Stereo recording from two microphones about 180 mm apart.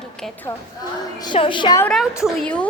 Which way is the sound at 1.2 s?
25° left (ahead or behind).